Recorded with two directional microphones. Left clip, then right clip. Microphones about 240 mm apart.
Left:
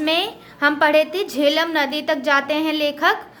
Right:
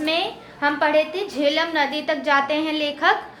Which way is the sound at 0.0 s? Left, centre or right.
Left.